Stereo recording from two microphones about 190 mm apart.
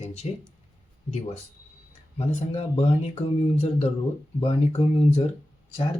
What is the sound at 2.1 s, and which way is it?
Speech, 35° left (ahead or behind).